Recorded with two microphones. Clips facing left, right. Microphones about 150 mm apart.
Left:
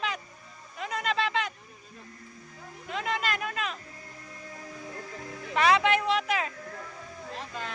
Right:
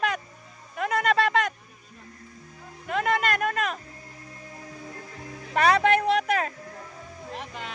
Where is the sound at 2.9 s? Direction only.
55° right (ahead or behind).